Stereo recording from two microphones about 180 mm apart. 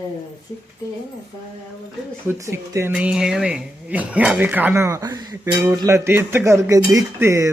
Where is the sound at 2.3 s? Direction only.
15° right (ahead or behind).